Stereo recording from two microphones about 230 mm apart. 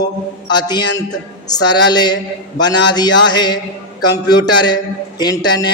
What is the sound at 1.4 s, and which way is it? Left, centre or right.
A man's voice, centre.